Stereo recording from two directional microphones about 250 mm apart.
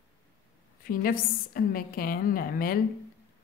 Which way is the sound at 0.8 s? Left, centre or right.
Left.